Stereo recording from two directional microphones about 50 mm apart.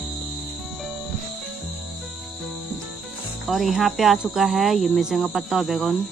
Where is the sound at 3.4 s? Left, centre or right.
Centre.